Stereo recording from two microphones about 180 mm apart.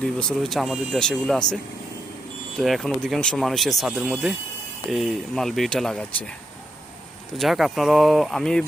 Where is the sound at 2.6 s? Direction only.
Centre (ahead or behind).